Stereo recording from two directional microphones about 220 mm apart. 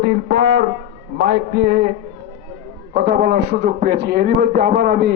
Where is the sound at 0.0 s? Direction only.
45° right (ahead or behind).